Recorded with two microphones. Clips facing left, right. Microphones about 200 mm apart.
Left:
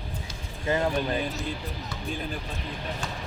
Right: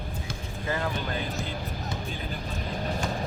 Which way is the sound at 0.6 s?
25° left (ahead or behind).